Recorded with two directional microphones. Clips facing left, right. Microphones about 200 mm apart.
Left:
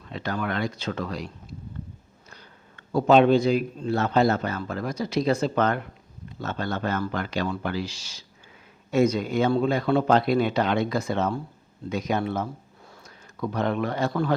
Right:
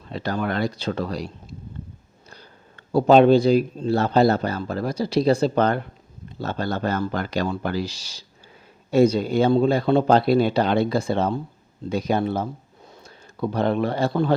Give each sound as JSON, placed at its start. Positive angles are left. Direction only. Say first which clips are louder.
{"t": 0.0, "sound": "speech", "louder": "right 4 dB", "side_deg": -35}